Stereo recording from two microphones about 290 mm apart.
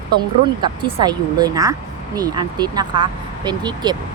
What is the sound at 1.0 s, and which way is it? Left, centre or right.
Speech, centre.